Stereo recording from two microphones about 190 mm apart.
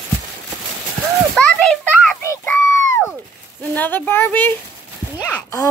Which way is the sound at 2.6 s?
15° left (ahead or behind).